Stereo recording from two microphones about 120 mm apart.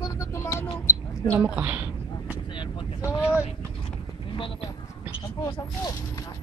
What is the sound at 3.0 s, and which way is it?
Speech, 10° right (ahead or behind).